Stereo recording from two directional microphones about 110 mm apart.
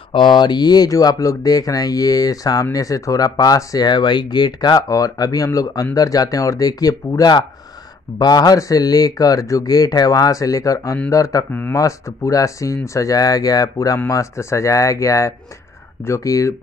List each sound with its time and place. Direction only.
0.1 s speech: 45° left (ahead or behind); by 16.5 s 30° left (ahead or behind)